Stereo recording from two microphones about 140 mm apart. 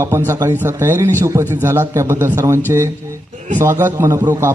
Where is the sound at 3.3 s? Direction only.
60° right (ahead or behind).